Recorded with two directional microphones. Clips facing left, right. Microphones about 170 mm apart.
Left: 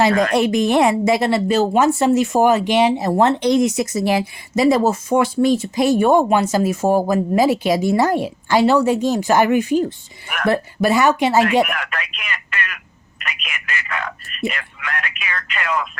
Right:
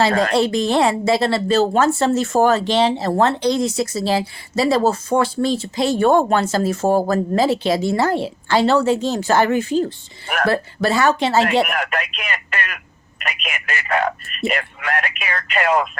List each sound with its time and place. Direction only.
0.3 s a woman's voice: 15° left (ahead or behind)
11.6 s speech: 35° right (ahead or behind)